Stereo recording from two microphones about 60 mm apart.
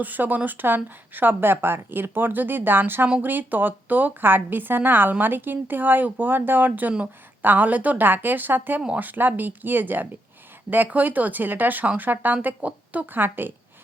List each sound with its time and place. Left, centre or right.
0.0 s speech: right